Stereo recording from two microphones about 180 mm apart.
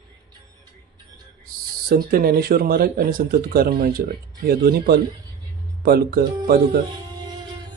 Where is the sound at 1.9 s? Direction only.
55° right (ahead or behind).